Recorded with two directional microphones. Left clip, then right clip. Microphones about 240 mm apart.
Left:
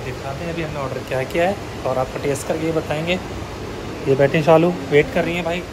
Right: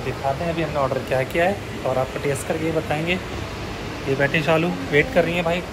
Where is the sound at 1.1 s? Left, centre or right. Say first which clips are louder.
Left 3 dB; centre.